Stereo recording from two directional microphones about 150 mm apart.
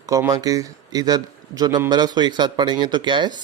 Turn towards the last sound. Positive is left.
turn(degrees=-30)  # may be behind; listen again after turning